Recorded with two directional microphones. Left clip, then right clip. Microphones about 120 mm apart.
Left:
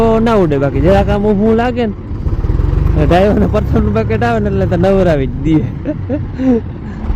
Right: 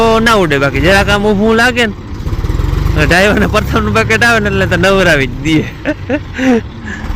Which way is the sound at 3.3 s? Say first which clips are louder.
Right 2 dB; 20° right (ahead or behind).